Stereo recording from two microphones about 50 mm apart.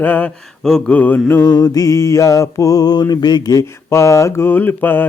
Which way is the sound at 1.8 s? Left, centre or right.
Left.